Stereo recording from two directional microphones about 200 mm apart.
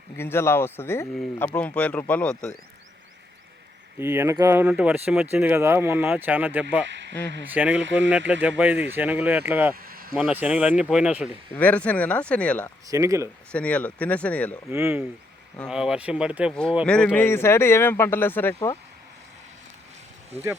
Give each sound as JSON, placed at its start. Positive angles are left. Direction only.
{"t": 0.2, "sound": "a man's voice", "side_deg": 10}
{"t": 3.9, "sound": "speech", "side_deg": -10}
{"t": 9.7, "sound": "a sound", "side_deg": -45}
{"t": 10.2, "sound": "speech", "side_deg": -5}
{"t": 11.5, "sound": "a man's voice", "side_deg": 5}
{"t": 12.9, "sound": "speech", "side_deg": -15}
{"t": 13.5, "sound": "a man's voice", "side_deg": 5}
{"t": 14.7, "sound": "speech", "side_deg": -10}
{"t": 15.5, "sound": "a man's voice", "side_deg": 0}